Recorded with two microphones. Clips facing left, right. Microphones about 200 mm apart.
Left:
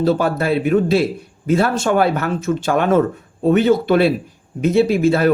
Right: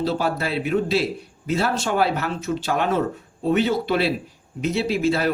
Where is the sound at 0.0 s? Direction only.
50° left (ahead or behind).